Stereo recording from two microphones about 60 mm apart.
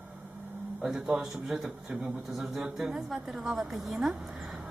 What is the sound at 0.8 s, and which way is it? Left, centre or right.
A man's voice, centre.